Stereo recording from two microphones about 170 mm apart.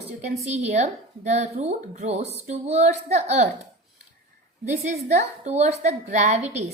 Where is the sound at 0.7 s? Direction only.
40° right (ahead or behind).